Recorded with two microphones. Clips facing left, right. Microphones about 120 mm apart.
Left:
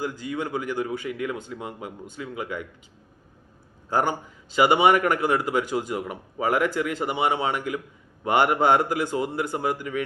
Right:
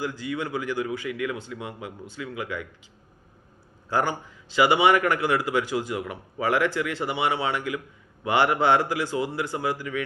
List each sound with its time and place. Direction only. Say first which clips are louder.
0.0 s speech: even; 45° left (ahead or behind)
4.5 s a man's voice: left 1 dB; 45° left (ahead or behind)